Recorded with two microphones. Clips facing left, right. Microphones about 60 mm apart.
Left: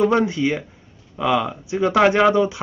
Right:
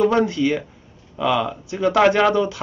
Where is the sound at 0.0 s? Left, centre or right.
Left.